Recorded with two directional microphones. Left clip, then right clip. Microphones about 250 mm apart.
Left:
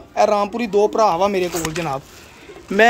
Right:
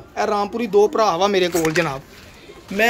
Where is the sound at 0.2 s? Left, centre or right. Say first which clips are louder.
Left 4 dB; centre.